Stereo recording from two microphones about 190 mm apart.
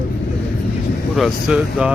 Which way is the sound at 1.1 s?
5° right (ahead or behind).